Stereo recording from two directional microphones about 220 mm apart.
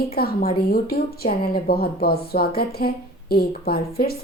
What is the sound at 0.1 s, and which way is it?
A woman's voice, 45° left (ahead or behind).